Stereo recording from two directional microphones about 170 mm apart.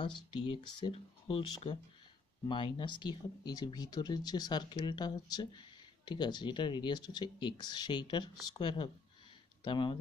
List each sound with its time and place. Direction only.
0.0 s speech: 30° left (ahead or behind)